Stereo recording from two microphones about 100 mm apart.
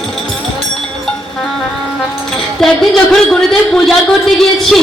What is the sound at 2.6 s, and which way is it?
A man's voice, 5° left (ahead or behind).